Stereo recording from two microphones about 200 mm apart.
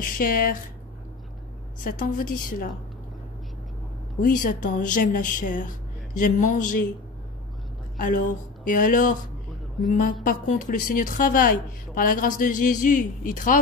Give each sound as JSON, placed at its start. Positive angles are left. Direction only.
{"t": 0.0, "sound": "a woman's voice", "side_deg": 45}
{"t": 1.9, "sound": "a woman's voice", "side_deg": 45}
{"t": 4.2, "sound": "speech", "side_deg": 45}
{"t": 8.0, "sound": "a woman's voice", "side_deg": 45}